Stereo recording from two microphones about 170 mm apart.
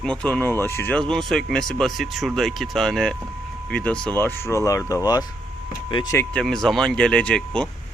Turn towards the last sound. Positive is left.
turn(degrees=5)  # may be behind; listen again after turning